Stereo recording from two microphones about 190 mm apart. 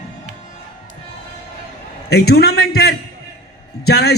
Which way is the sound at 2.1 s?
55° left (ahead or behind).